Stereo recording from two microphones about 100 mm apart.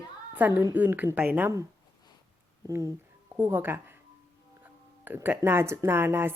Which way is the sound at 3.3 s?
20° right (ahead or behind).